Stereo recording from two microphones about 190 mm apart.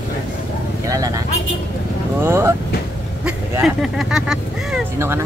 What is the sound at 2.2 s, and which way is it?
Speech, 15° right (ahead or behind).